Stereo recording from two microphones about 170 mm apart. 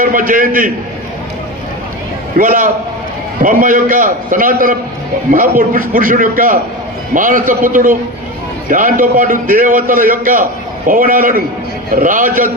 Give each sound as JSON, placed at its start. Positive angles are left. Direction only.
{"t": 0.0, "sound": "a man's voice", "side_deg": -55}
{"t": 2.4, "sound": "a man's voice", "side_deg": -55}